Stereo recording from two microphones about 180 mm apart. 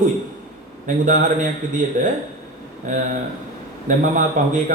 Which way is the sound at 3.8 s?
45° right (ahead or behind).